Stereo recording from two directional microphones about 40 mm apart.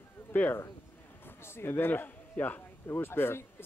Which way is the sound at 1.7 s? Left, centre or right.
Left.